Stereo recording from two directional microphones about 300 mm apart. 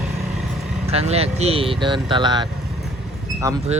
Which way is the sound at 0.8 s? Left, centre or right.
Right.